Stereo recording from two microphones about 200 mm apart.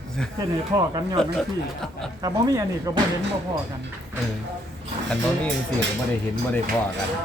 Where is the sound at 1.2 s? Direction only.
5° left (ahead or behind).